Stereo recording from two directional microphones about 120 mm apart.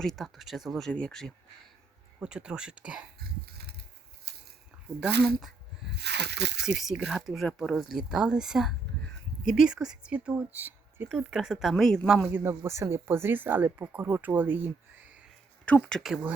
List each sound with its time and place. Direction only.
0.0 s speech: centre (ahead or behind)
2.1 s speech: 10° right (ahead or behind)
4.9 s speech: 5° right (ahead or behind)
6.6 s speech: 5° right (ahead or behind)
12.3 s speech: 20° right (ahead or behind)
15.6 s speech: 10° left (ahead or behind)